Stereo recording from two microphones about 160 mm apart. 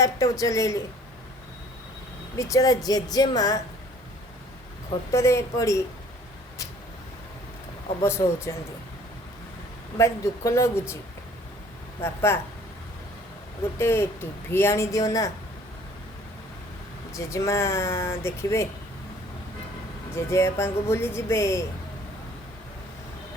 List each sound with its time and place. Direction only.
0.0 s speech: 20° left (ahead or behind)
2.4 s speech: 20° left (ahead or behind)
5.1 s speech: 20° left (ahead or behind)
8.0 s speech: 15° left (ahead or behind)
10.0 s speech: 15° left (ahead or behind)
12.0 s speech: 15° left (ahead or behind)
13.7 s speech: 15° left (ahead or behind)
17.1 s speech: 20° left (ahead or behind)
20.1 s speech: 15° left (ahead or behind)